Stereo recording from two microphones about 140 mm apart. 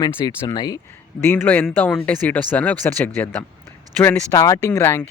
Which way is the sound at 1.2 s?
15° left (ahead or behind).